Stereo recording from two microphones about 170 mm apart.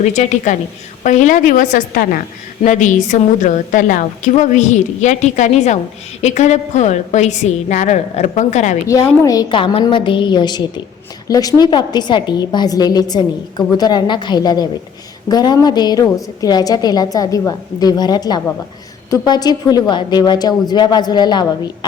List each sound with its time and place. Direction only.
0.0 s a woman's voice: 45° left (ahead or behind)
8.9 s a woman's voice: 20° left (ahead or behind)